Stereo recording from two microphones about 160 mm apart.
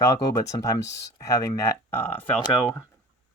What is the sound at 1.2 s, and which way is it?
Speech, 20° left (ahead or behind).